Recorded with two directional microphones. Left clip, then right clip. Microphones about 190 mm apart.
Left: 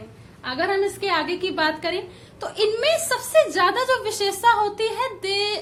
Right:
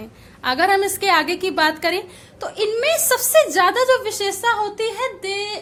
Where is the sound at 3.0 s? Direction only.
30° right (ahead or behind); by 5.6 s 5° right (ahead or behind).